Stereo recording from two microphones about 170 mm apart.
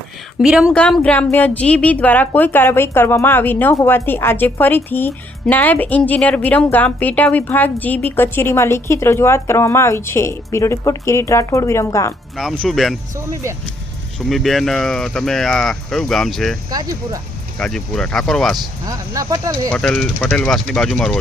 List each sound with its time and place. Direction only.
0.4 s speech: 5° right (ahead or behind)
0.7 s speech: 5° left (ahead or behind)
12.4 s speech: centre (ahead or behind)
13.1 s speech: 15° right (ahead or behind)
14.3 s speech: centre (ahead or behind)
16.6 s speech: 20° right (ahead or behind)
17.6 s speech: 5° left (ahead or behind)
18.9 s speech: 20° right (ahead or behind)
19.7 s speech: 5° left (ahead or behind)